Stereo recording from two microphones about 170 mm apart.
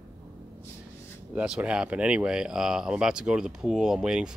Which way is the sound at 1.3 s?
5° right (ahead or behind).